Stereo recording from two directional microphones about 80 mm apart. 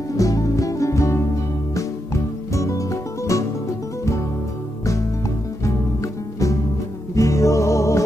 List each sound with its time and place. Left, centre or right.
0.2 s music: left
2.5 s music: left
7.2 s music: left